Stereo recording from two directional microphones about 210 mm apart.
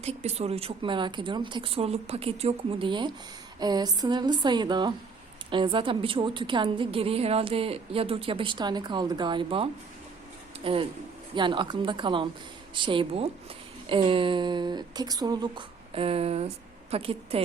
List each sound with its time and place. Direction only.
0.0 s a woman's voice: 30° right (ahead or behind)